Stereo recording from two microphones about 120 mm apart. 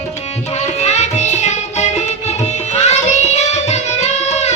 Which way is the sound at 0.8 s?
70° left (ahead or behind).